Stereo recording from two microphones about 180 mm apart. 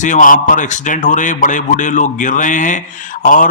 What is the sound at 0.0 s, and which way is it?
Speech, 45° left (ahead or behind).